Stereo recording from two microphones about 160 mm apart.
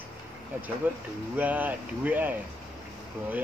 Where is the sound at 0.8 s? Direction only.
10° right (ahead or behind).